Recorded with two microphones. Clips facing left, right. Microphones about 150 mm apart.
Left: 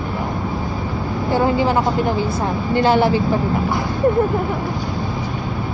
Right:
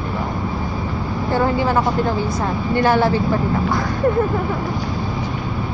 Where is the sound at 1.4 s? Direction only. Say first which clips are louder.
Left 1 dB; 20° left (ahead or behind).